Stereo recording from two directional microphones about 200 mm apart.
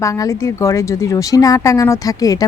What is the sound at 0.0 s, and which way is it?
Speech, 15° left (ahead or behind).